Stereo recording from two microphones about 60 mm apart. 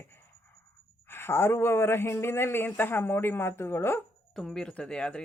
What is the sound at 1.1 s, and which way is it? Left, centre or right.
A man's voice, left.